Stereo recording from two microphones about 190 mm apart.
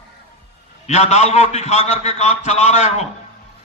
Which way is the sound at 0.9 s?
35° left (ahead or behind).